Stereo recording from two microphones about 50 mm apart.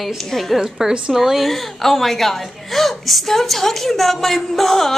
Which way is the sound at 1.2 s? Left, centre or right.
Centre.